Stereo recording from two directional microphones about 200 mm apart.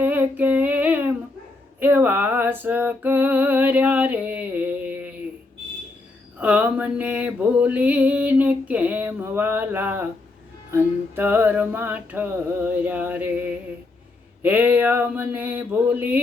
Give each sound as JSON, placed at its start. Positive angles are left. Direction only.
{"t": 0.0, "sound": "humming", "side_deg": -10}
{"t": 1.8, "sound": "a sound", "side_deg": -10}
{"t": 6.4, "sound": "mantra", "side_deg": -5}